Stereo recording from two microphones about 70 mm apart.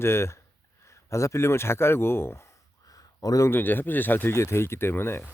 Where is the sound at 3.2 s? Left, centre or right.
Left.